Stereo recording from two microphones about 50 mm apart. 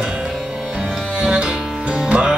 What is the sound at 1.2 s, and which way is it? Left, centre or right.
Music, centre.